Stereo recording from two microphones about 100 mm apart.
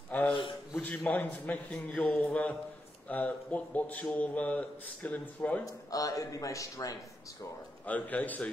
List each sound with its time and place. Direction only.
0.3 s a sound: 55° left (ahead or behind)
0.8 s a man's voice: 15° left (ahead or behind)
5.7 s a man's voice: 35° left (ahead or behind)
7.8 s a man's voice: 15° left (ahead or behind)